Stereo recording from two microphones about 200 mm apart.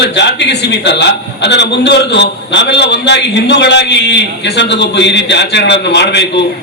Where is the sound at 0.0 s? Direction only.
60° left (ahead or behind).